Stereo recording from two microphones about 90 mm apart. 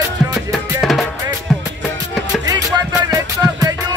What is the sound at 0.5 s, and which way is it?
Drum, centre (ahead or behind).